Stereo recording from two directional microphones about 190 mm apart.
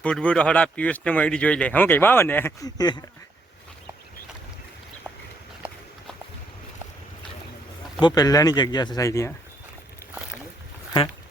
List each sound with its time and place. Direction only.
0.0 s speech: 5° left (ahead or behind)
8.0 s speech: 20° left (ahead or behind)